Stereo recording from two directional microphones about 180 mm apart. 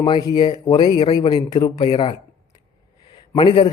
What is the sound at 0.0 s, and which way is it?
A man's voice, 20° left (ahead or behind).